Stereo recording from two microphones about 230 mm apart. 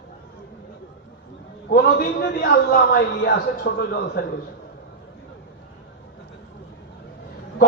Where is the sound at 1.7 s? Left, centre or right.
Left.